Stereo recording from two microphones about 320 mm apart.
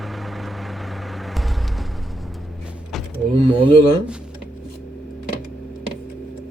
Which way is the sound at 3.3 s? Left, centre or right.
Centre.